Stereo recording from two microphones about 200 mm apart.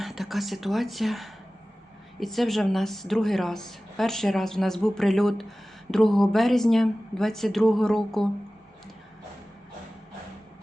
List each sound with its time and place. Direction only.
0.0 s a woman's voice: centre (ahead or behind)